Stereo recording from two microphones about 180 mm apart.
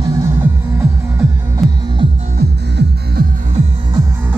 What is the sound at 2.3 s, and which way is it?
Music, 60° right (ahead or behind).